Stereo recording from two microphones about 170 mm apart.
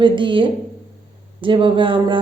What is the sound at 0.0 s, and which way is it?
A woman's voice, 30° right (ahead or behind).